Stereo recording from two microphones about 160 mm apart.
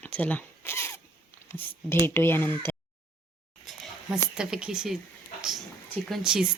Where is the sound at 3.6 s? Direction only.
Centre (ahead or behind).